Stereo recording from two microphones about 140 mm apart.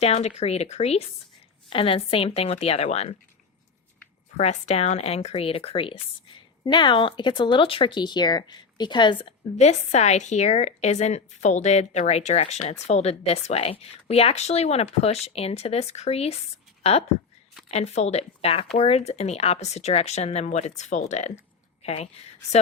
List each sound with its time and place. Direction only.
0.0 s a woman's voice: 50° left (ahead or behind)
4.4 s a woman's voice: 50° left (ahead or behind); by 9.3 s 35° left (ahead or behind)
9.6 s a woman's voice: 55° left (ahead or behind)
17.7 s a woman's voice: 50° left (ahead or behind)